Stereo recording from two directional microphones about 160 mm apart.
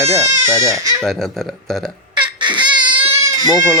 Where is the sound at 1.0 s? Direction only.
Centre (ahead or behind).